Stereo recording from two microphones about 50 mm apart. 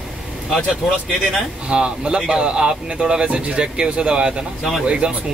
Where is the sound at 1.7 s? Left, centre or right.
Centre.